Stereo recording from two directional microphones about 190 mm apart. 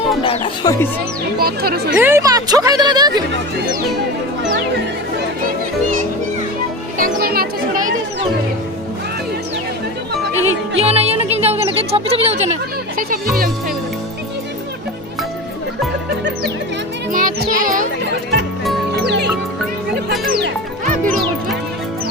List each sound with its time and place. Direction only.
0.2 s speech: 25° left (ahead or behind)
1.4 s speech: 55° right (ahead or behind)
2.0 s speech: 10° right (ahead or behind)
7.0 s music: 50° right (ahead or behind)
10.8 s speech: 35° right (ahead or behind)
13.0 s a child's voice: 50° right (ahead or behind)
17.1 s a child's voice: 45° right (ahead or behind)
18.9 s music: 60° right (ahead or behind); by 21.1 s 45° right (ahead or behind)